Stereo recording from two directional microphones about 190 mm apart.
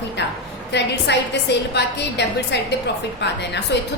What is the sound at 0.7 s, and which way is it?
A woman's voice, 65° left (ahead or behind).